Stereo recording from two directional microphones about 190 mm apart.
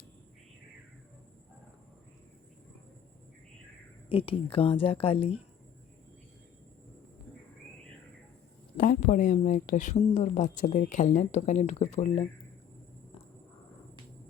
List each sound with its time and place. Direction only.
4.1 s speech: 30° left (ahead or behind)
8.8 s speech: 45° left (ahead or behind)